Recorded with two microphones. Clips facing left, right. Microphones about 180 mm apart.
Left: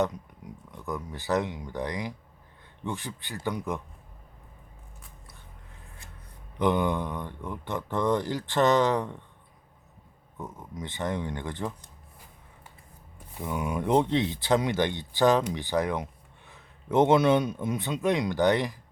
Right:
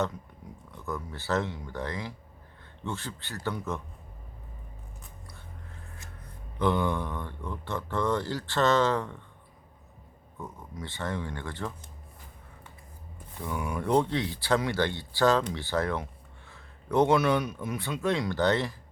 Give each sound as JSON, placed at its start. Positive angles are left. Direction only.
{"t": 0.7, "sound": "speech", "side_deg": 15}
{"t": 6.6, "sound": "speech", "side_deg": 20}
{"t": 10.3, "sound": "speech", "side_deg": 20}
{"t": 13.3, "sound": "speech", "side_deg": 15}